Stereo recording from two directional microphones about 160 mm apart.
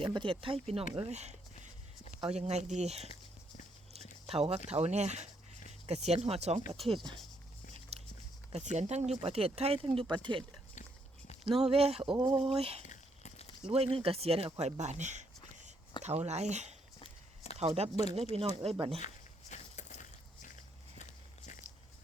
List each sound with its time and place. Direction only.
0.0 s speech: 30° right (ahead or behind)
4.3 s speech: 40° right (ahead or behind)
6.7 s speech: centre (ahead or behind)
7.9 s biting: 40° right (ahead or behind)
8.5 s speech: 45° right (ahead or behind)
11.7 s speech: 40° right (ahead or behind)
12.1 s speech: 25° right (ahead or behind)
12.4 s speech: 40° right (ahead or behind)
12.8 s a sound: 50° left (ahead or behind)
13.7 s speech: 35° right (ahead or behind)
17.0 s walk: 40° left (ahead or behind)
17.6 s speech: 40° right (ahead or behind)
18.9 s walk: 45° left (ahead or behind)